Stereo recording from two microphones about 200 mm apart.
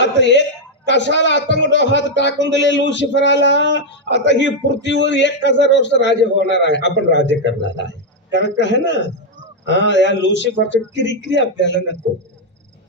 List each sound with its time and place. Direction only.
0.0 s a man's voice: 60° left (ahead or behind)